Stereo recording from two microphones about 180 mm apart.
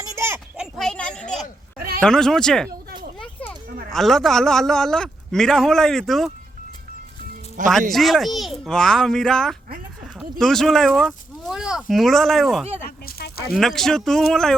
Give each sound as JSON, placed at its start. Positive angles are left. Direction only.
{"t": 0.0, "sound": "children playing", "side_deg": -15}
{"t": 2.0, "sound": "a man's voice", "side_deg": 5}
{"t": 3.8, "sound": "a man's voice", "side_deg": 0}
{"t": 7.6, "sound": "speech", "side_deg": -45}
{"t": 7.9, "sound": "a man's voice", "side_deg": 0}
{"t": 13.1, "sound": "a sound", "side_deg": 55}
{"t": 13.5, "sound": "a man's voice", "side_deg": 0}